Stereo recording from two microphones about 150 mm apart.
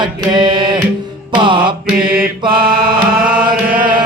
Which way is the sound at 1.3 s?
35° right (ahead or behind).